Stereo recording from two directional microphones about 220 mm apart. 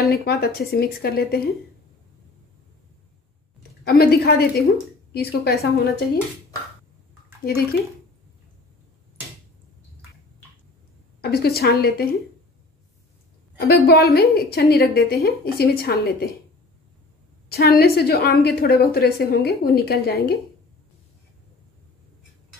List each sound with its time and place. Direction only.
0.0 s a woman's voice: 45° left (ahead or behind)
3.8 s a woman's voice: 45° left (ahead or behind)
11.1 s a woman's voice: 45° left (ahead or behind)
13.6 s a woman's voice: 45° left (ahead or behind)
17.5 s a woman's voice: 45° left (ahead or behind)